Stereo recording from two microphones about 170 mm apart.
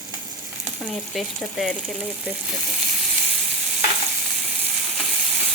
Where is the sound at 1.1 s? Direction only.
Centre (ahead or behind).